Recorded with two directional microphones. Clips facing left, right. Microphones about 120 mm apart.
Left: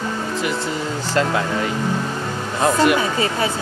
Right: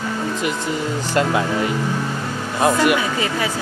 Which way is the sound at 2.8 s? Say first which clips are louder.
Left 1 dB; 35° left (ahead or behind).